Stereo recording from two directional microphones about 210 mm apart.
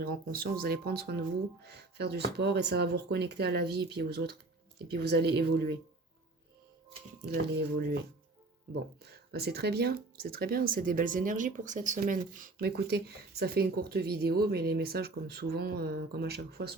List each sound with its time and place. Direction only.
0.0 s speech: 45° right (ahead or behind)
7.3 s speech: 55° right (ahead or behind)